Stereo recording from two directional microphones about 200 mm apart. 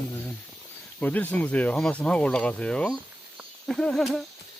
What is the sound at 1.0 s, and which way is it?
Speech, 10° left (ahead or behind).